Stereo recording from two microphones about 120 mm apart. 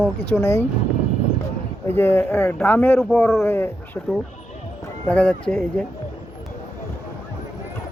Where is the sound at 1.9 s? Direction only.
20° left (ahead or behind).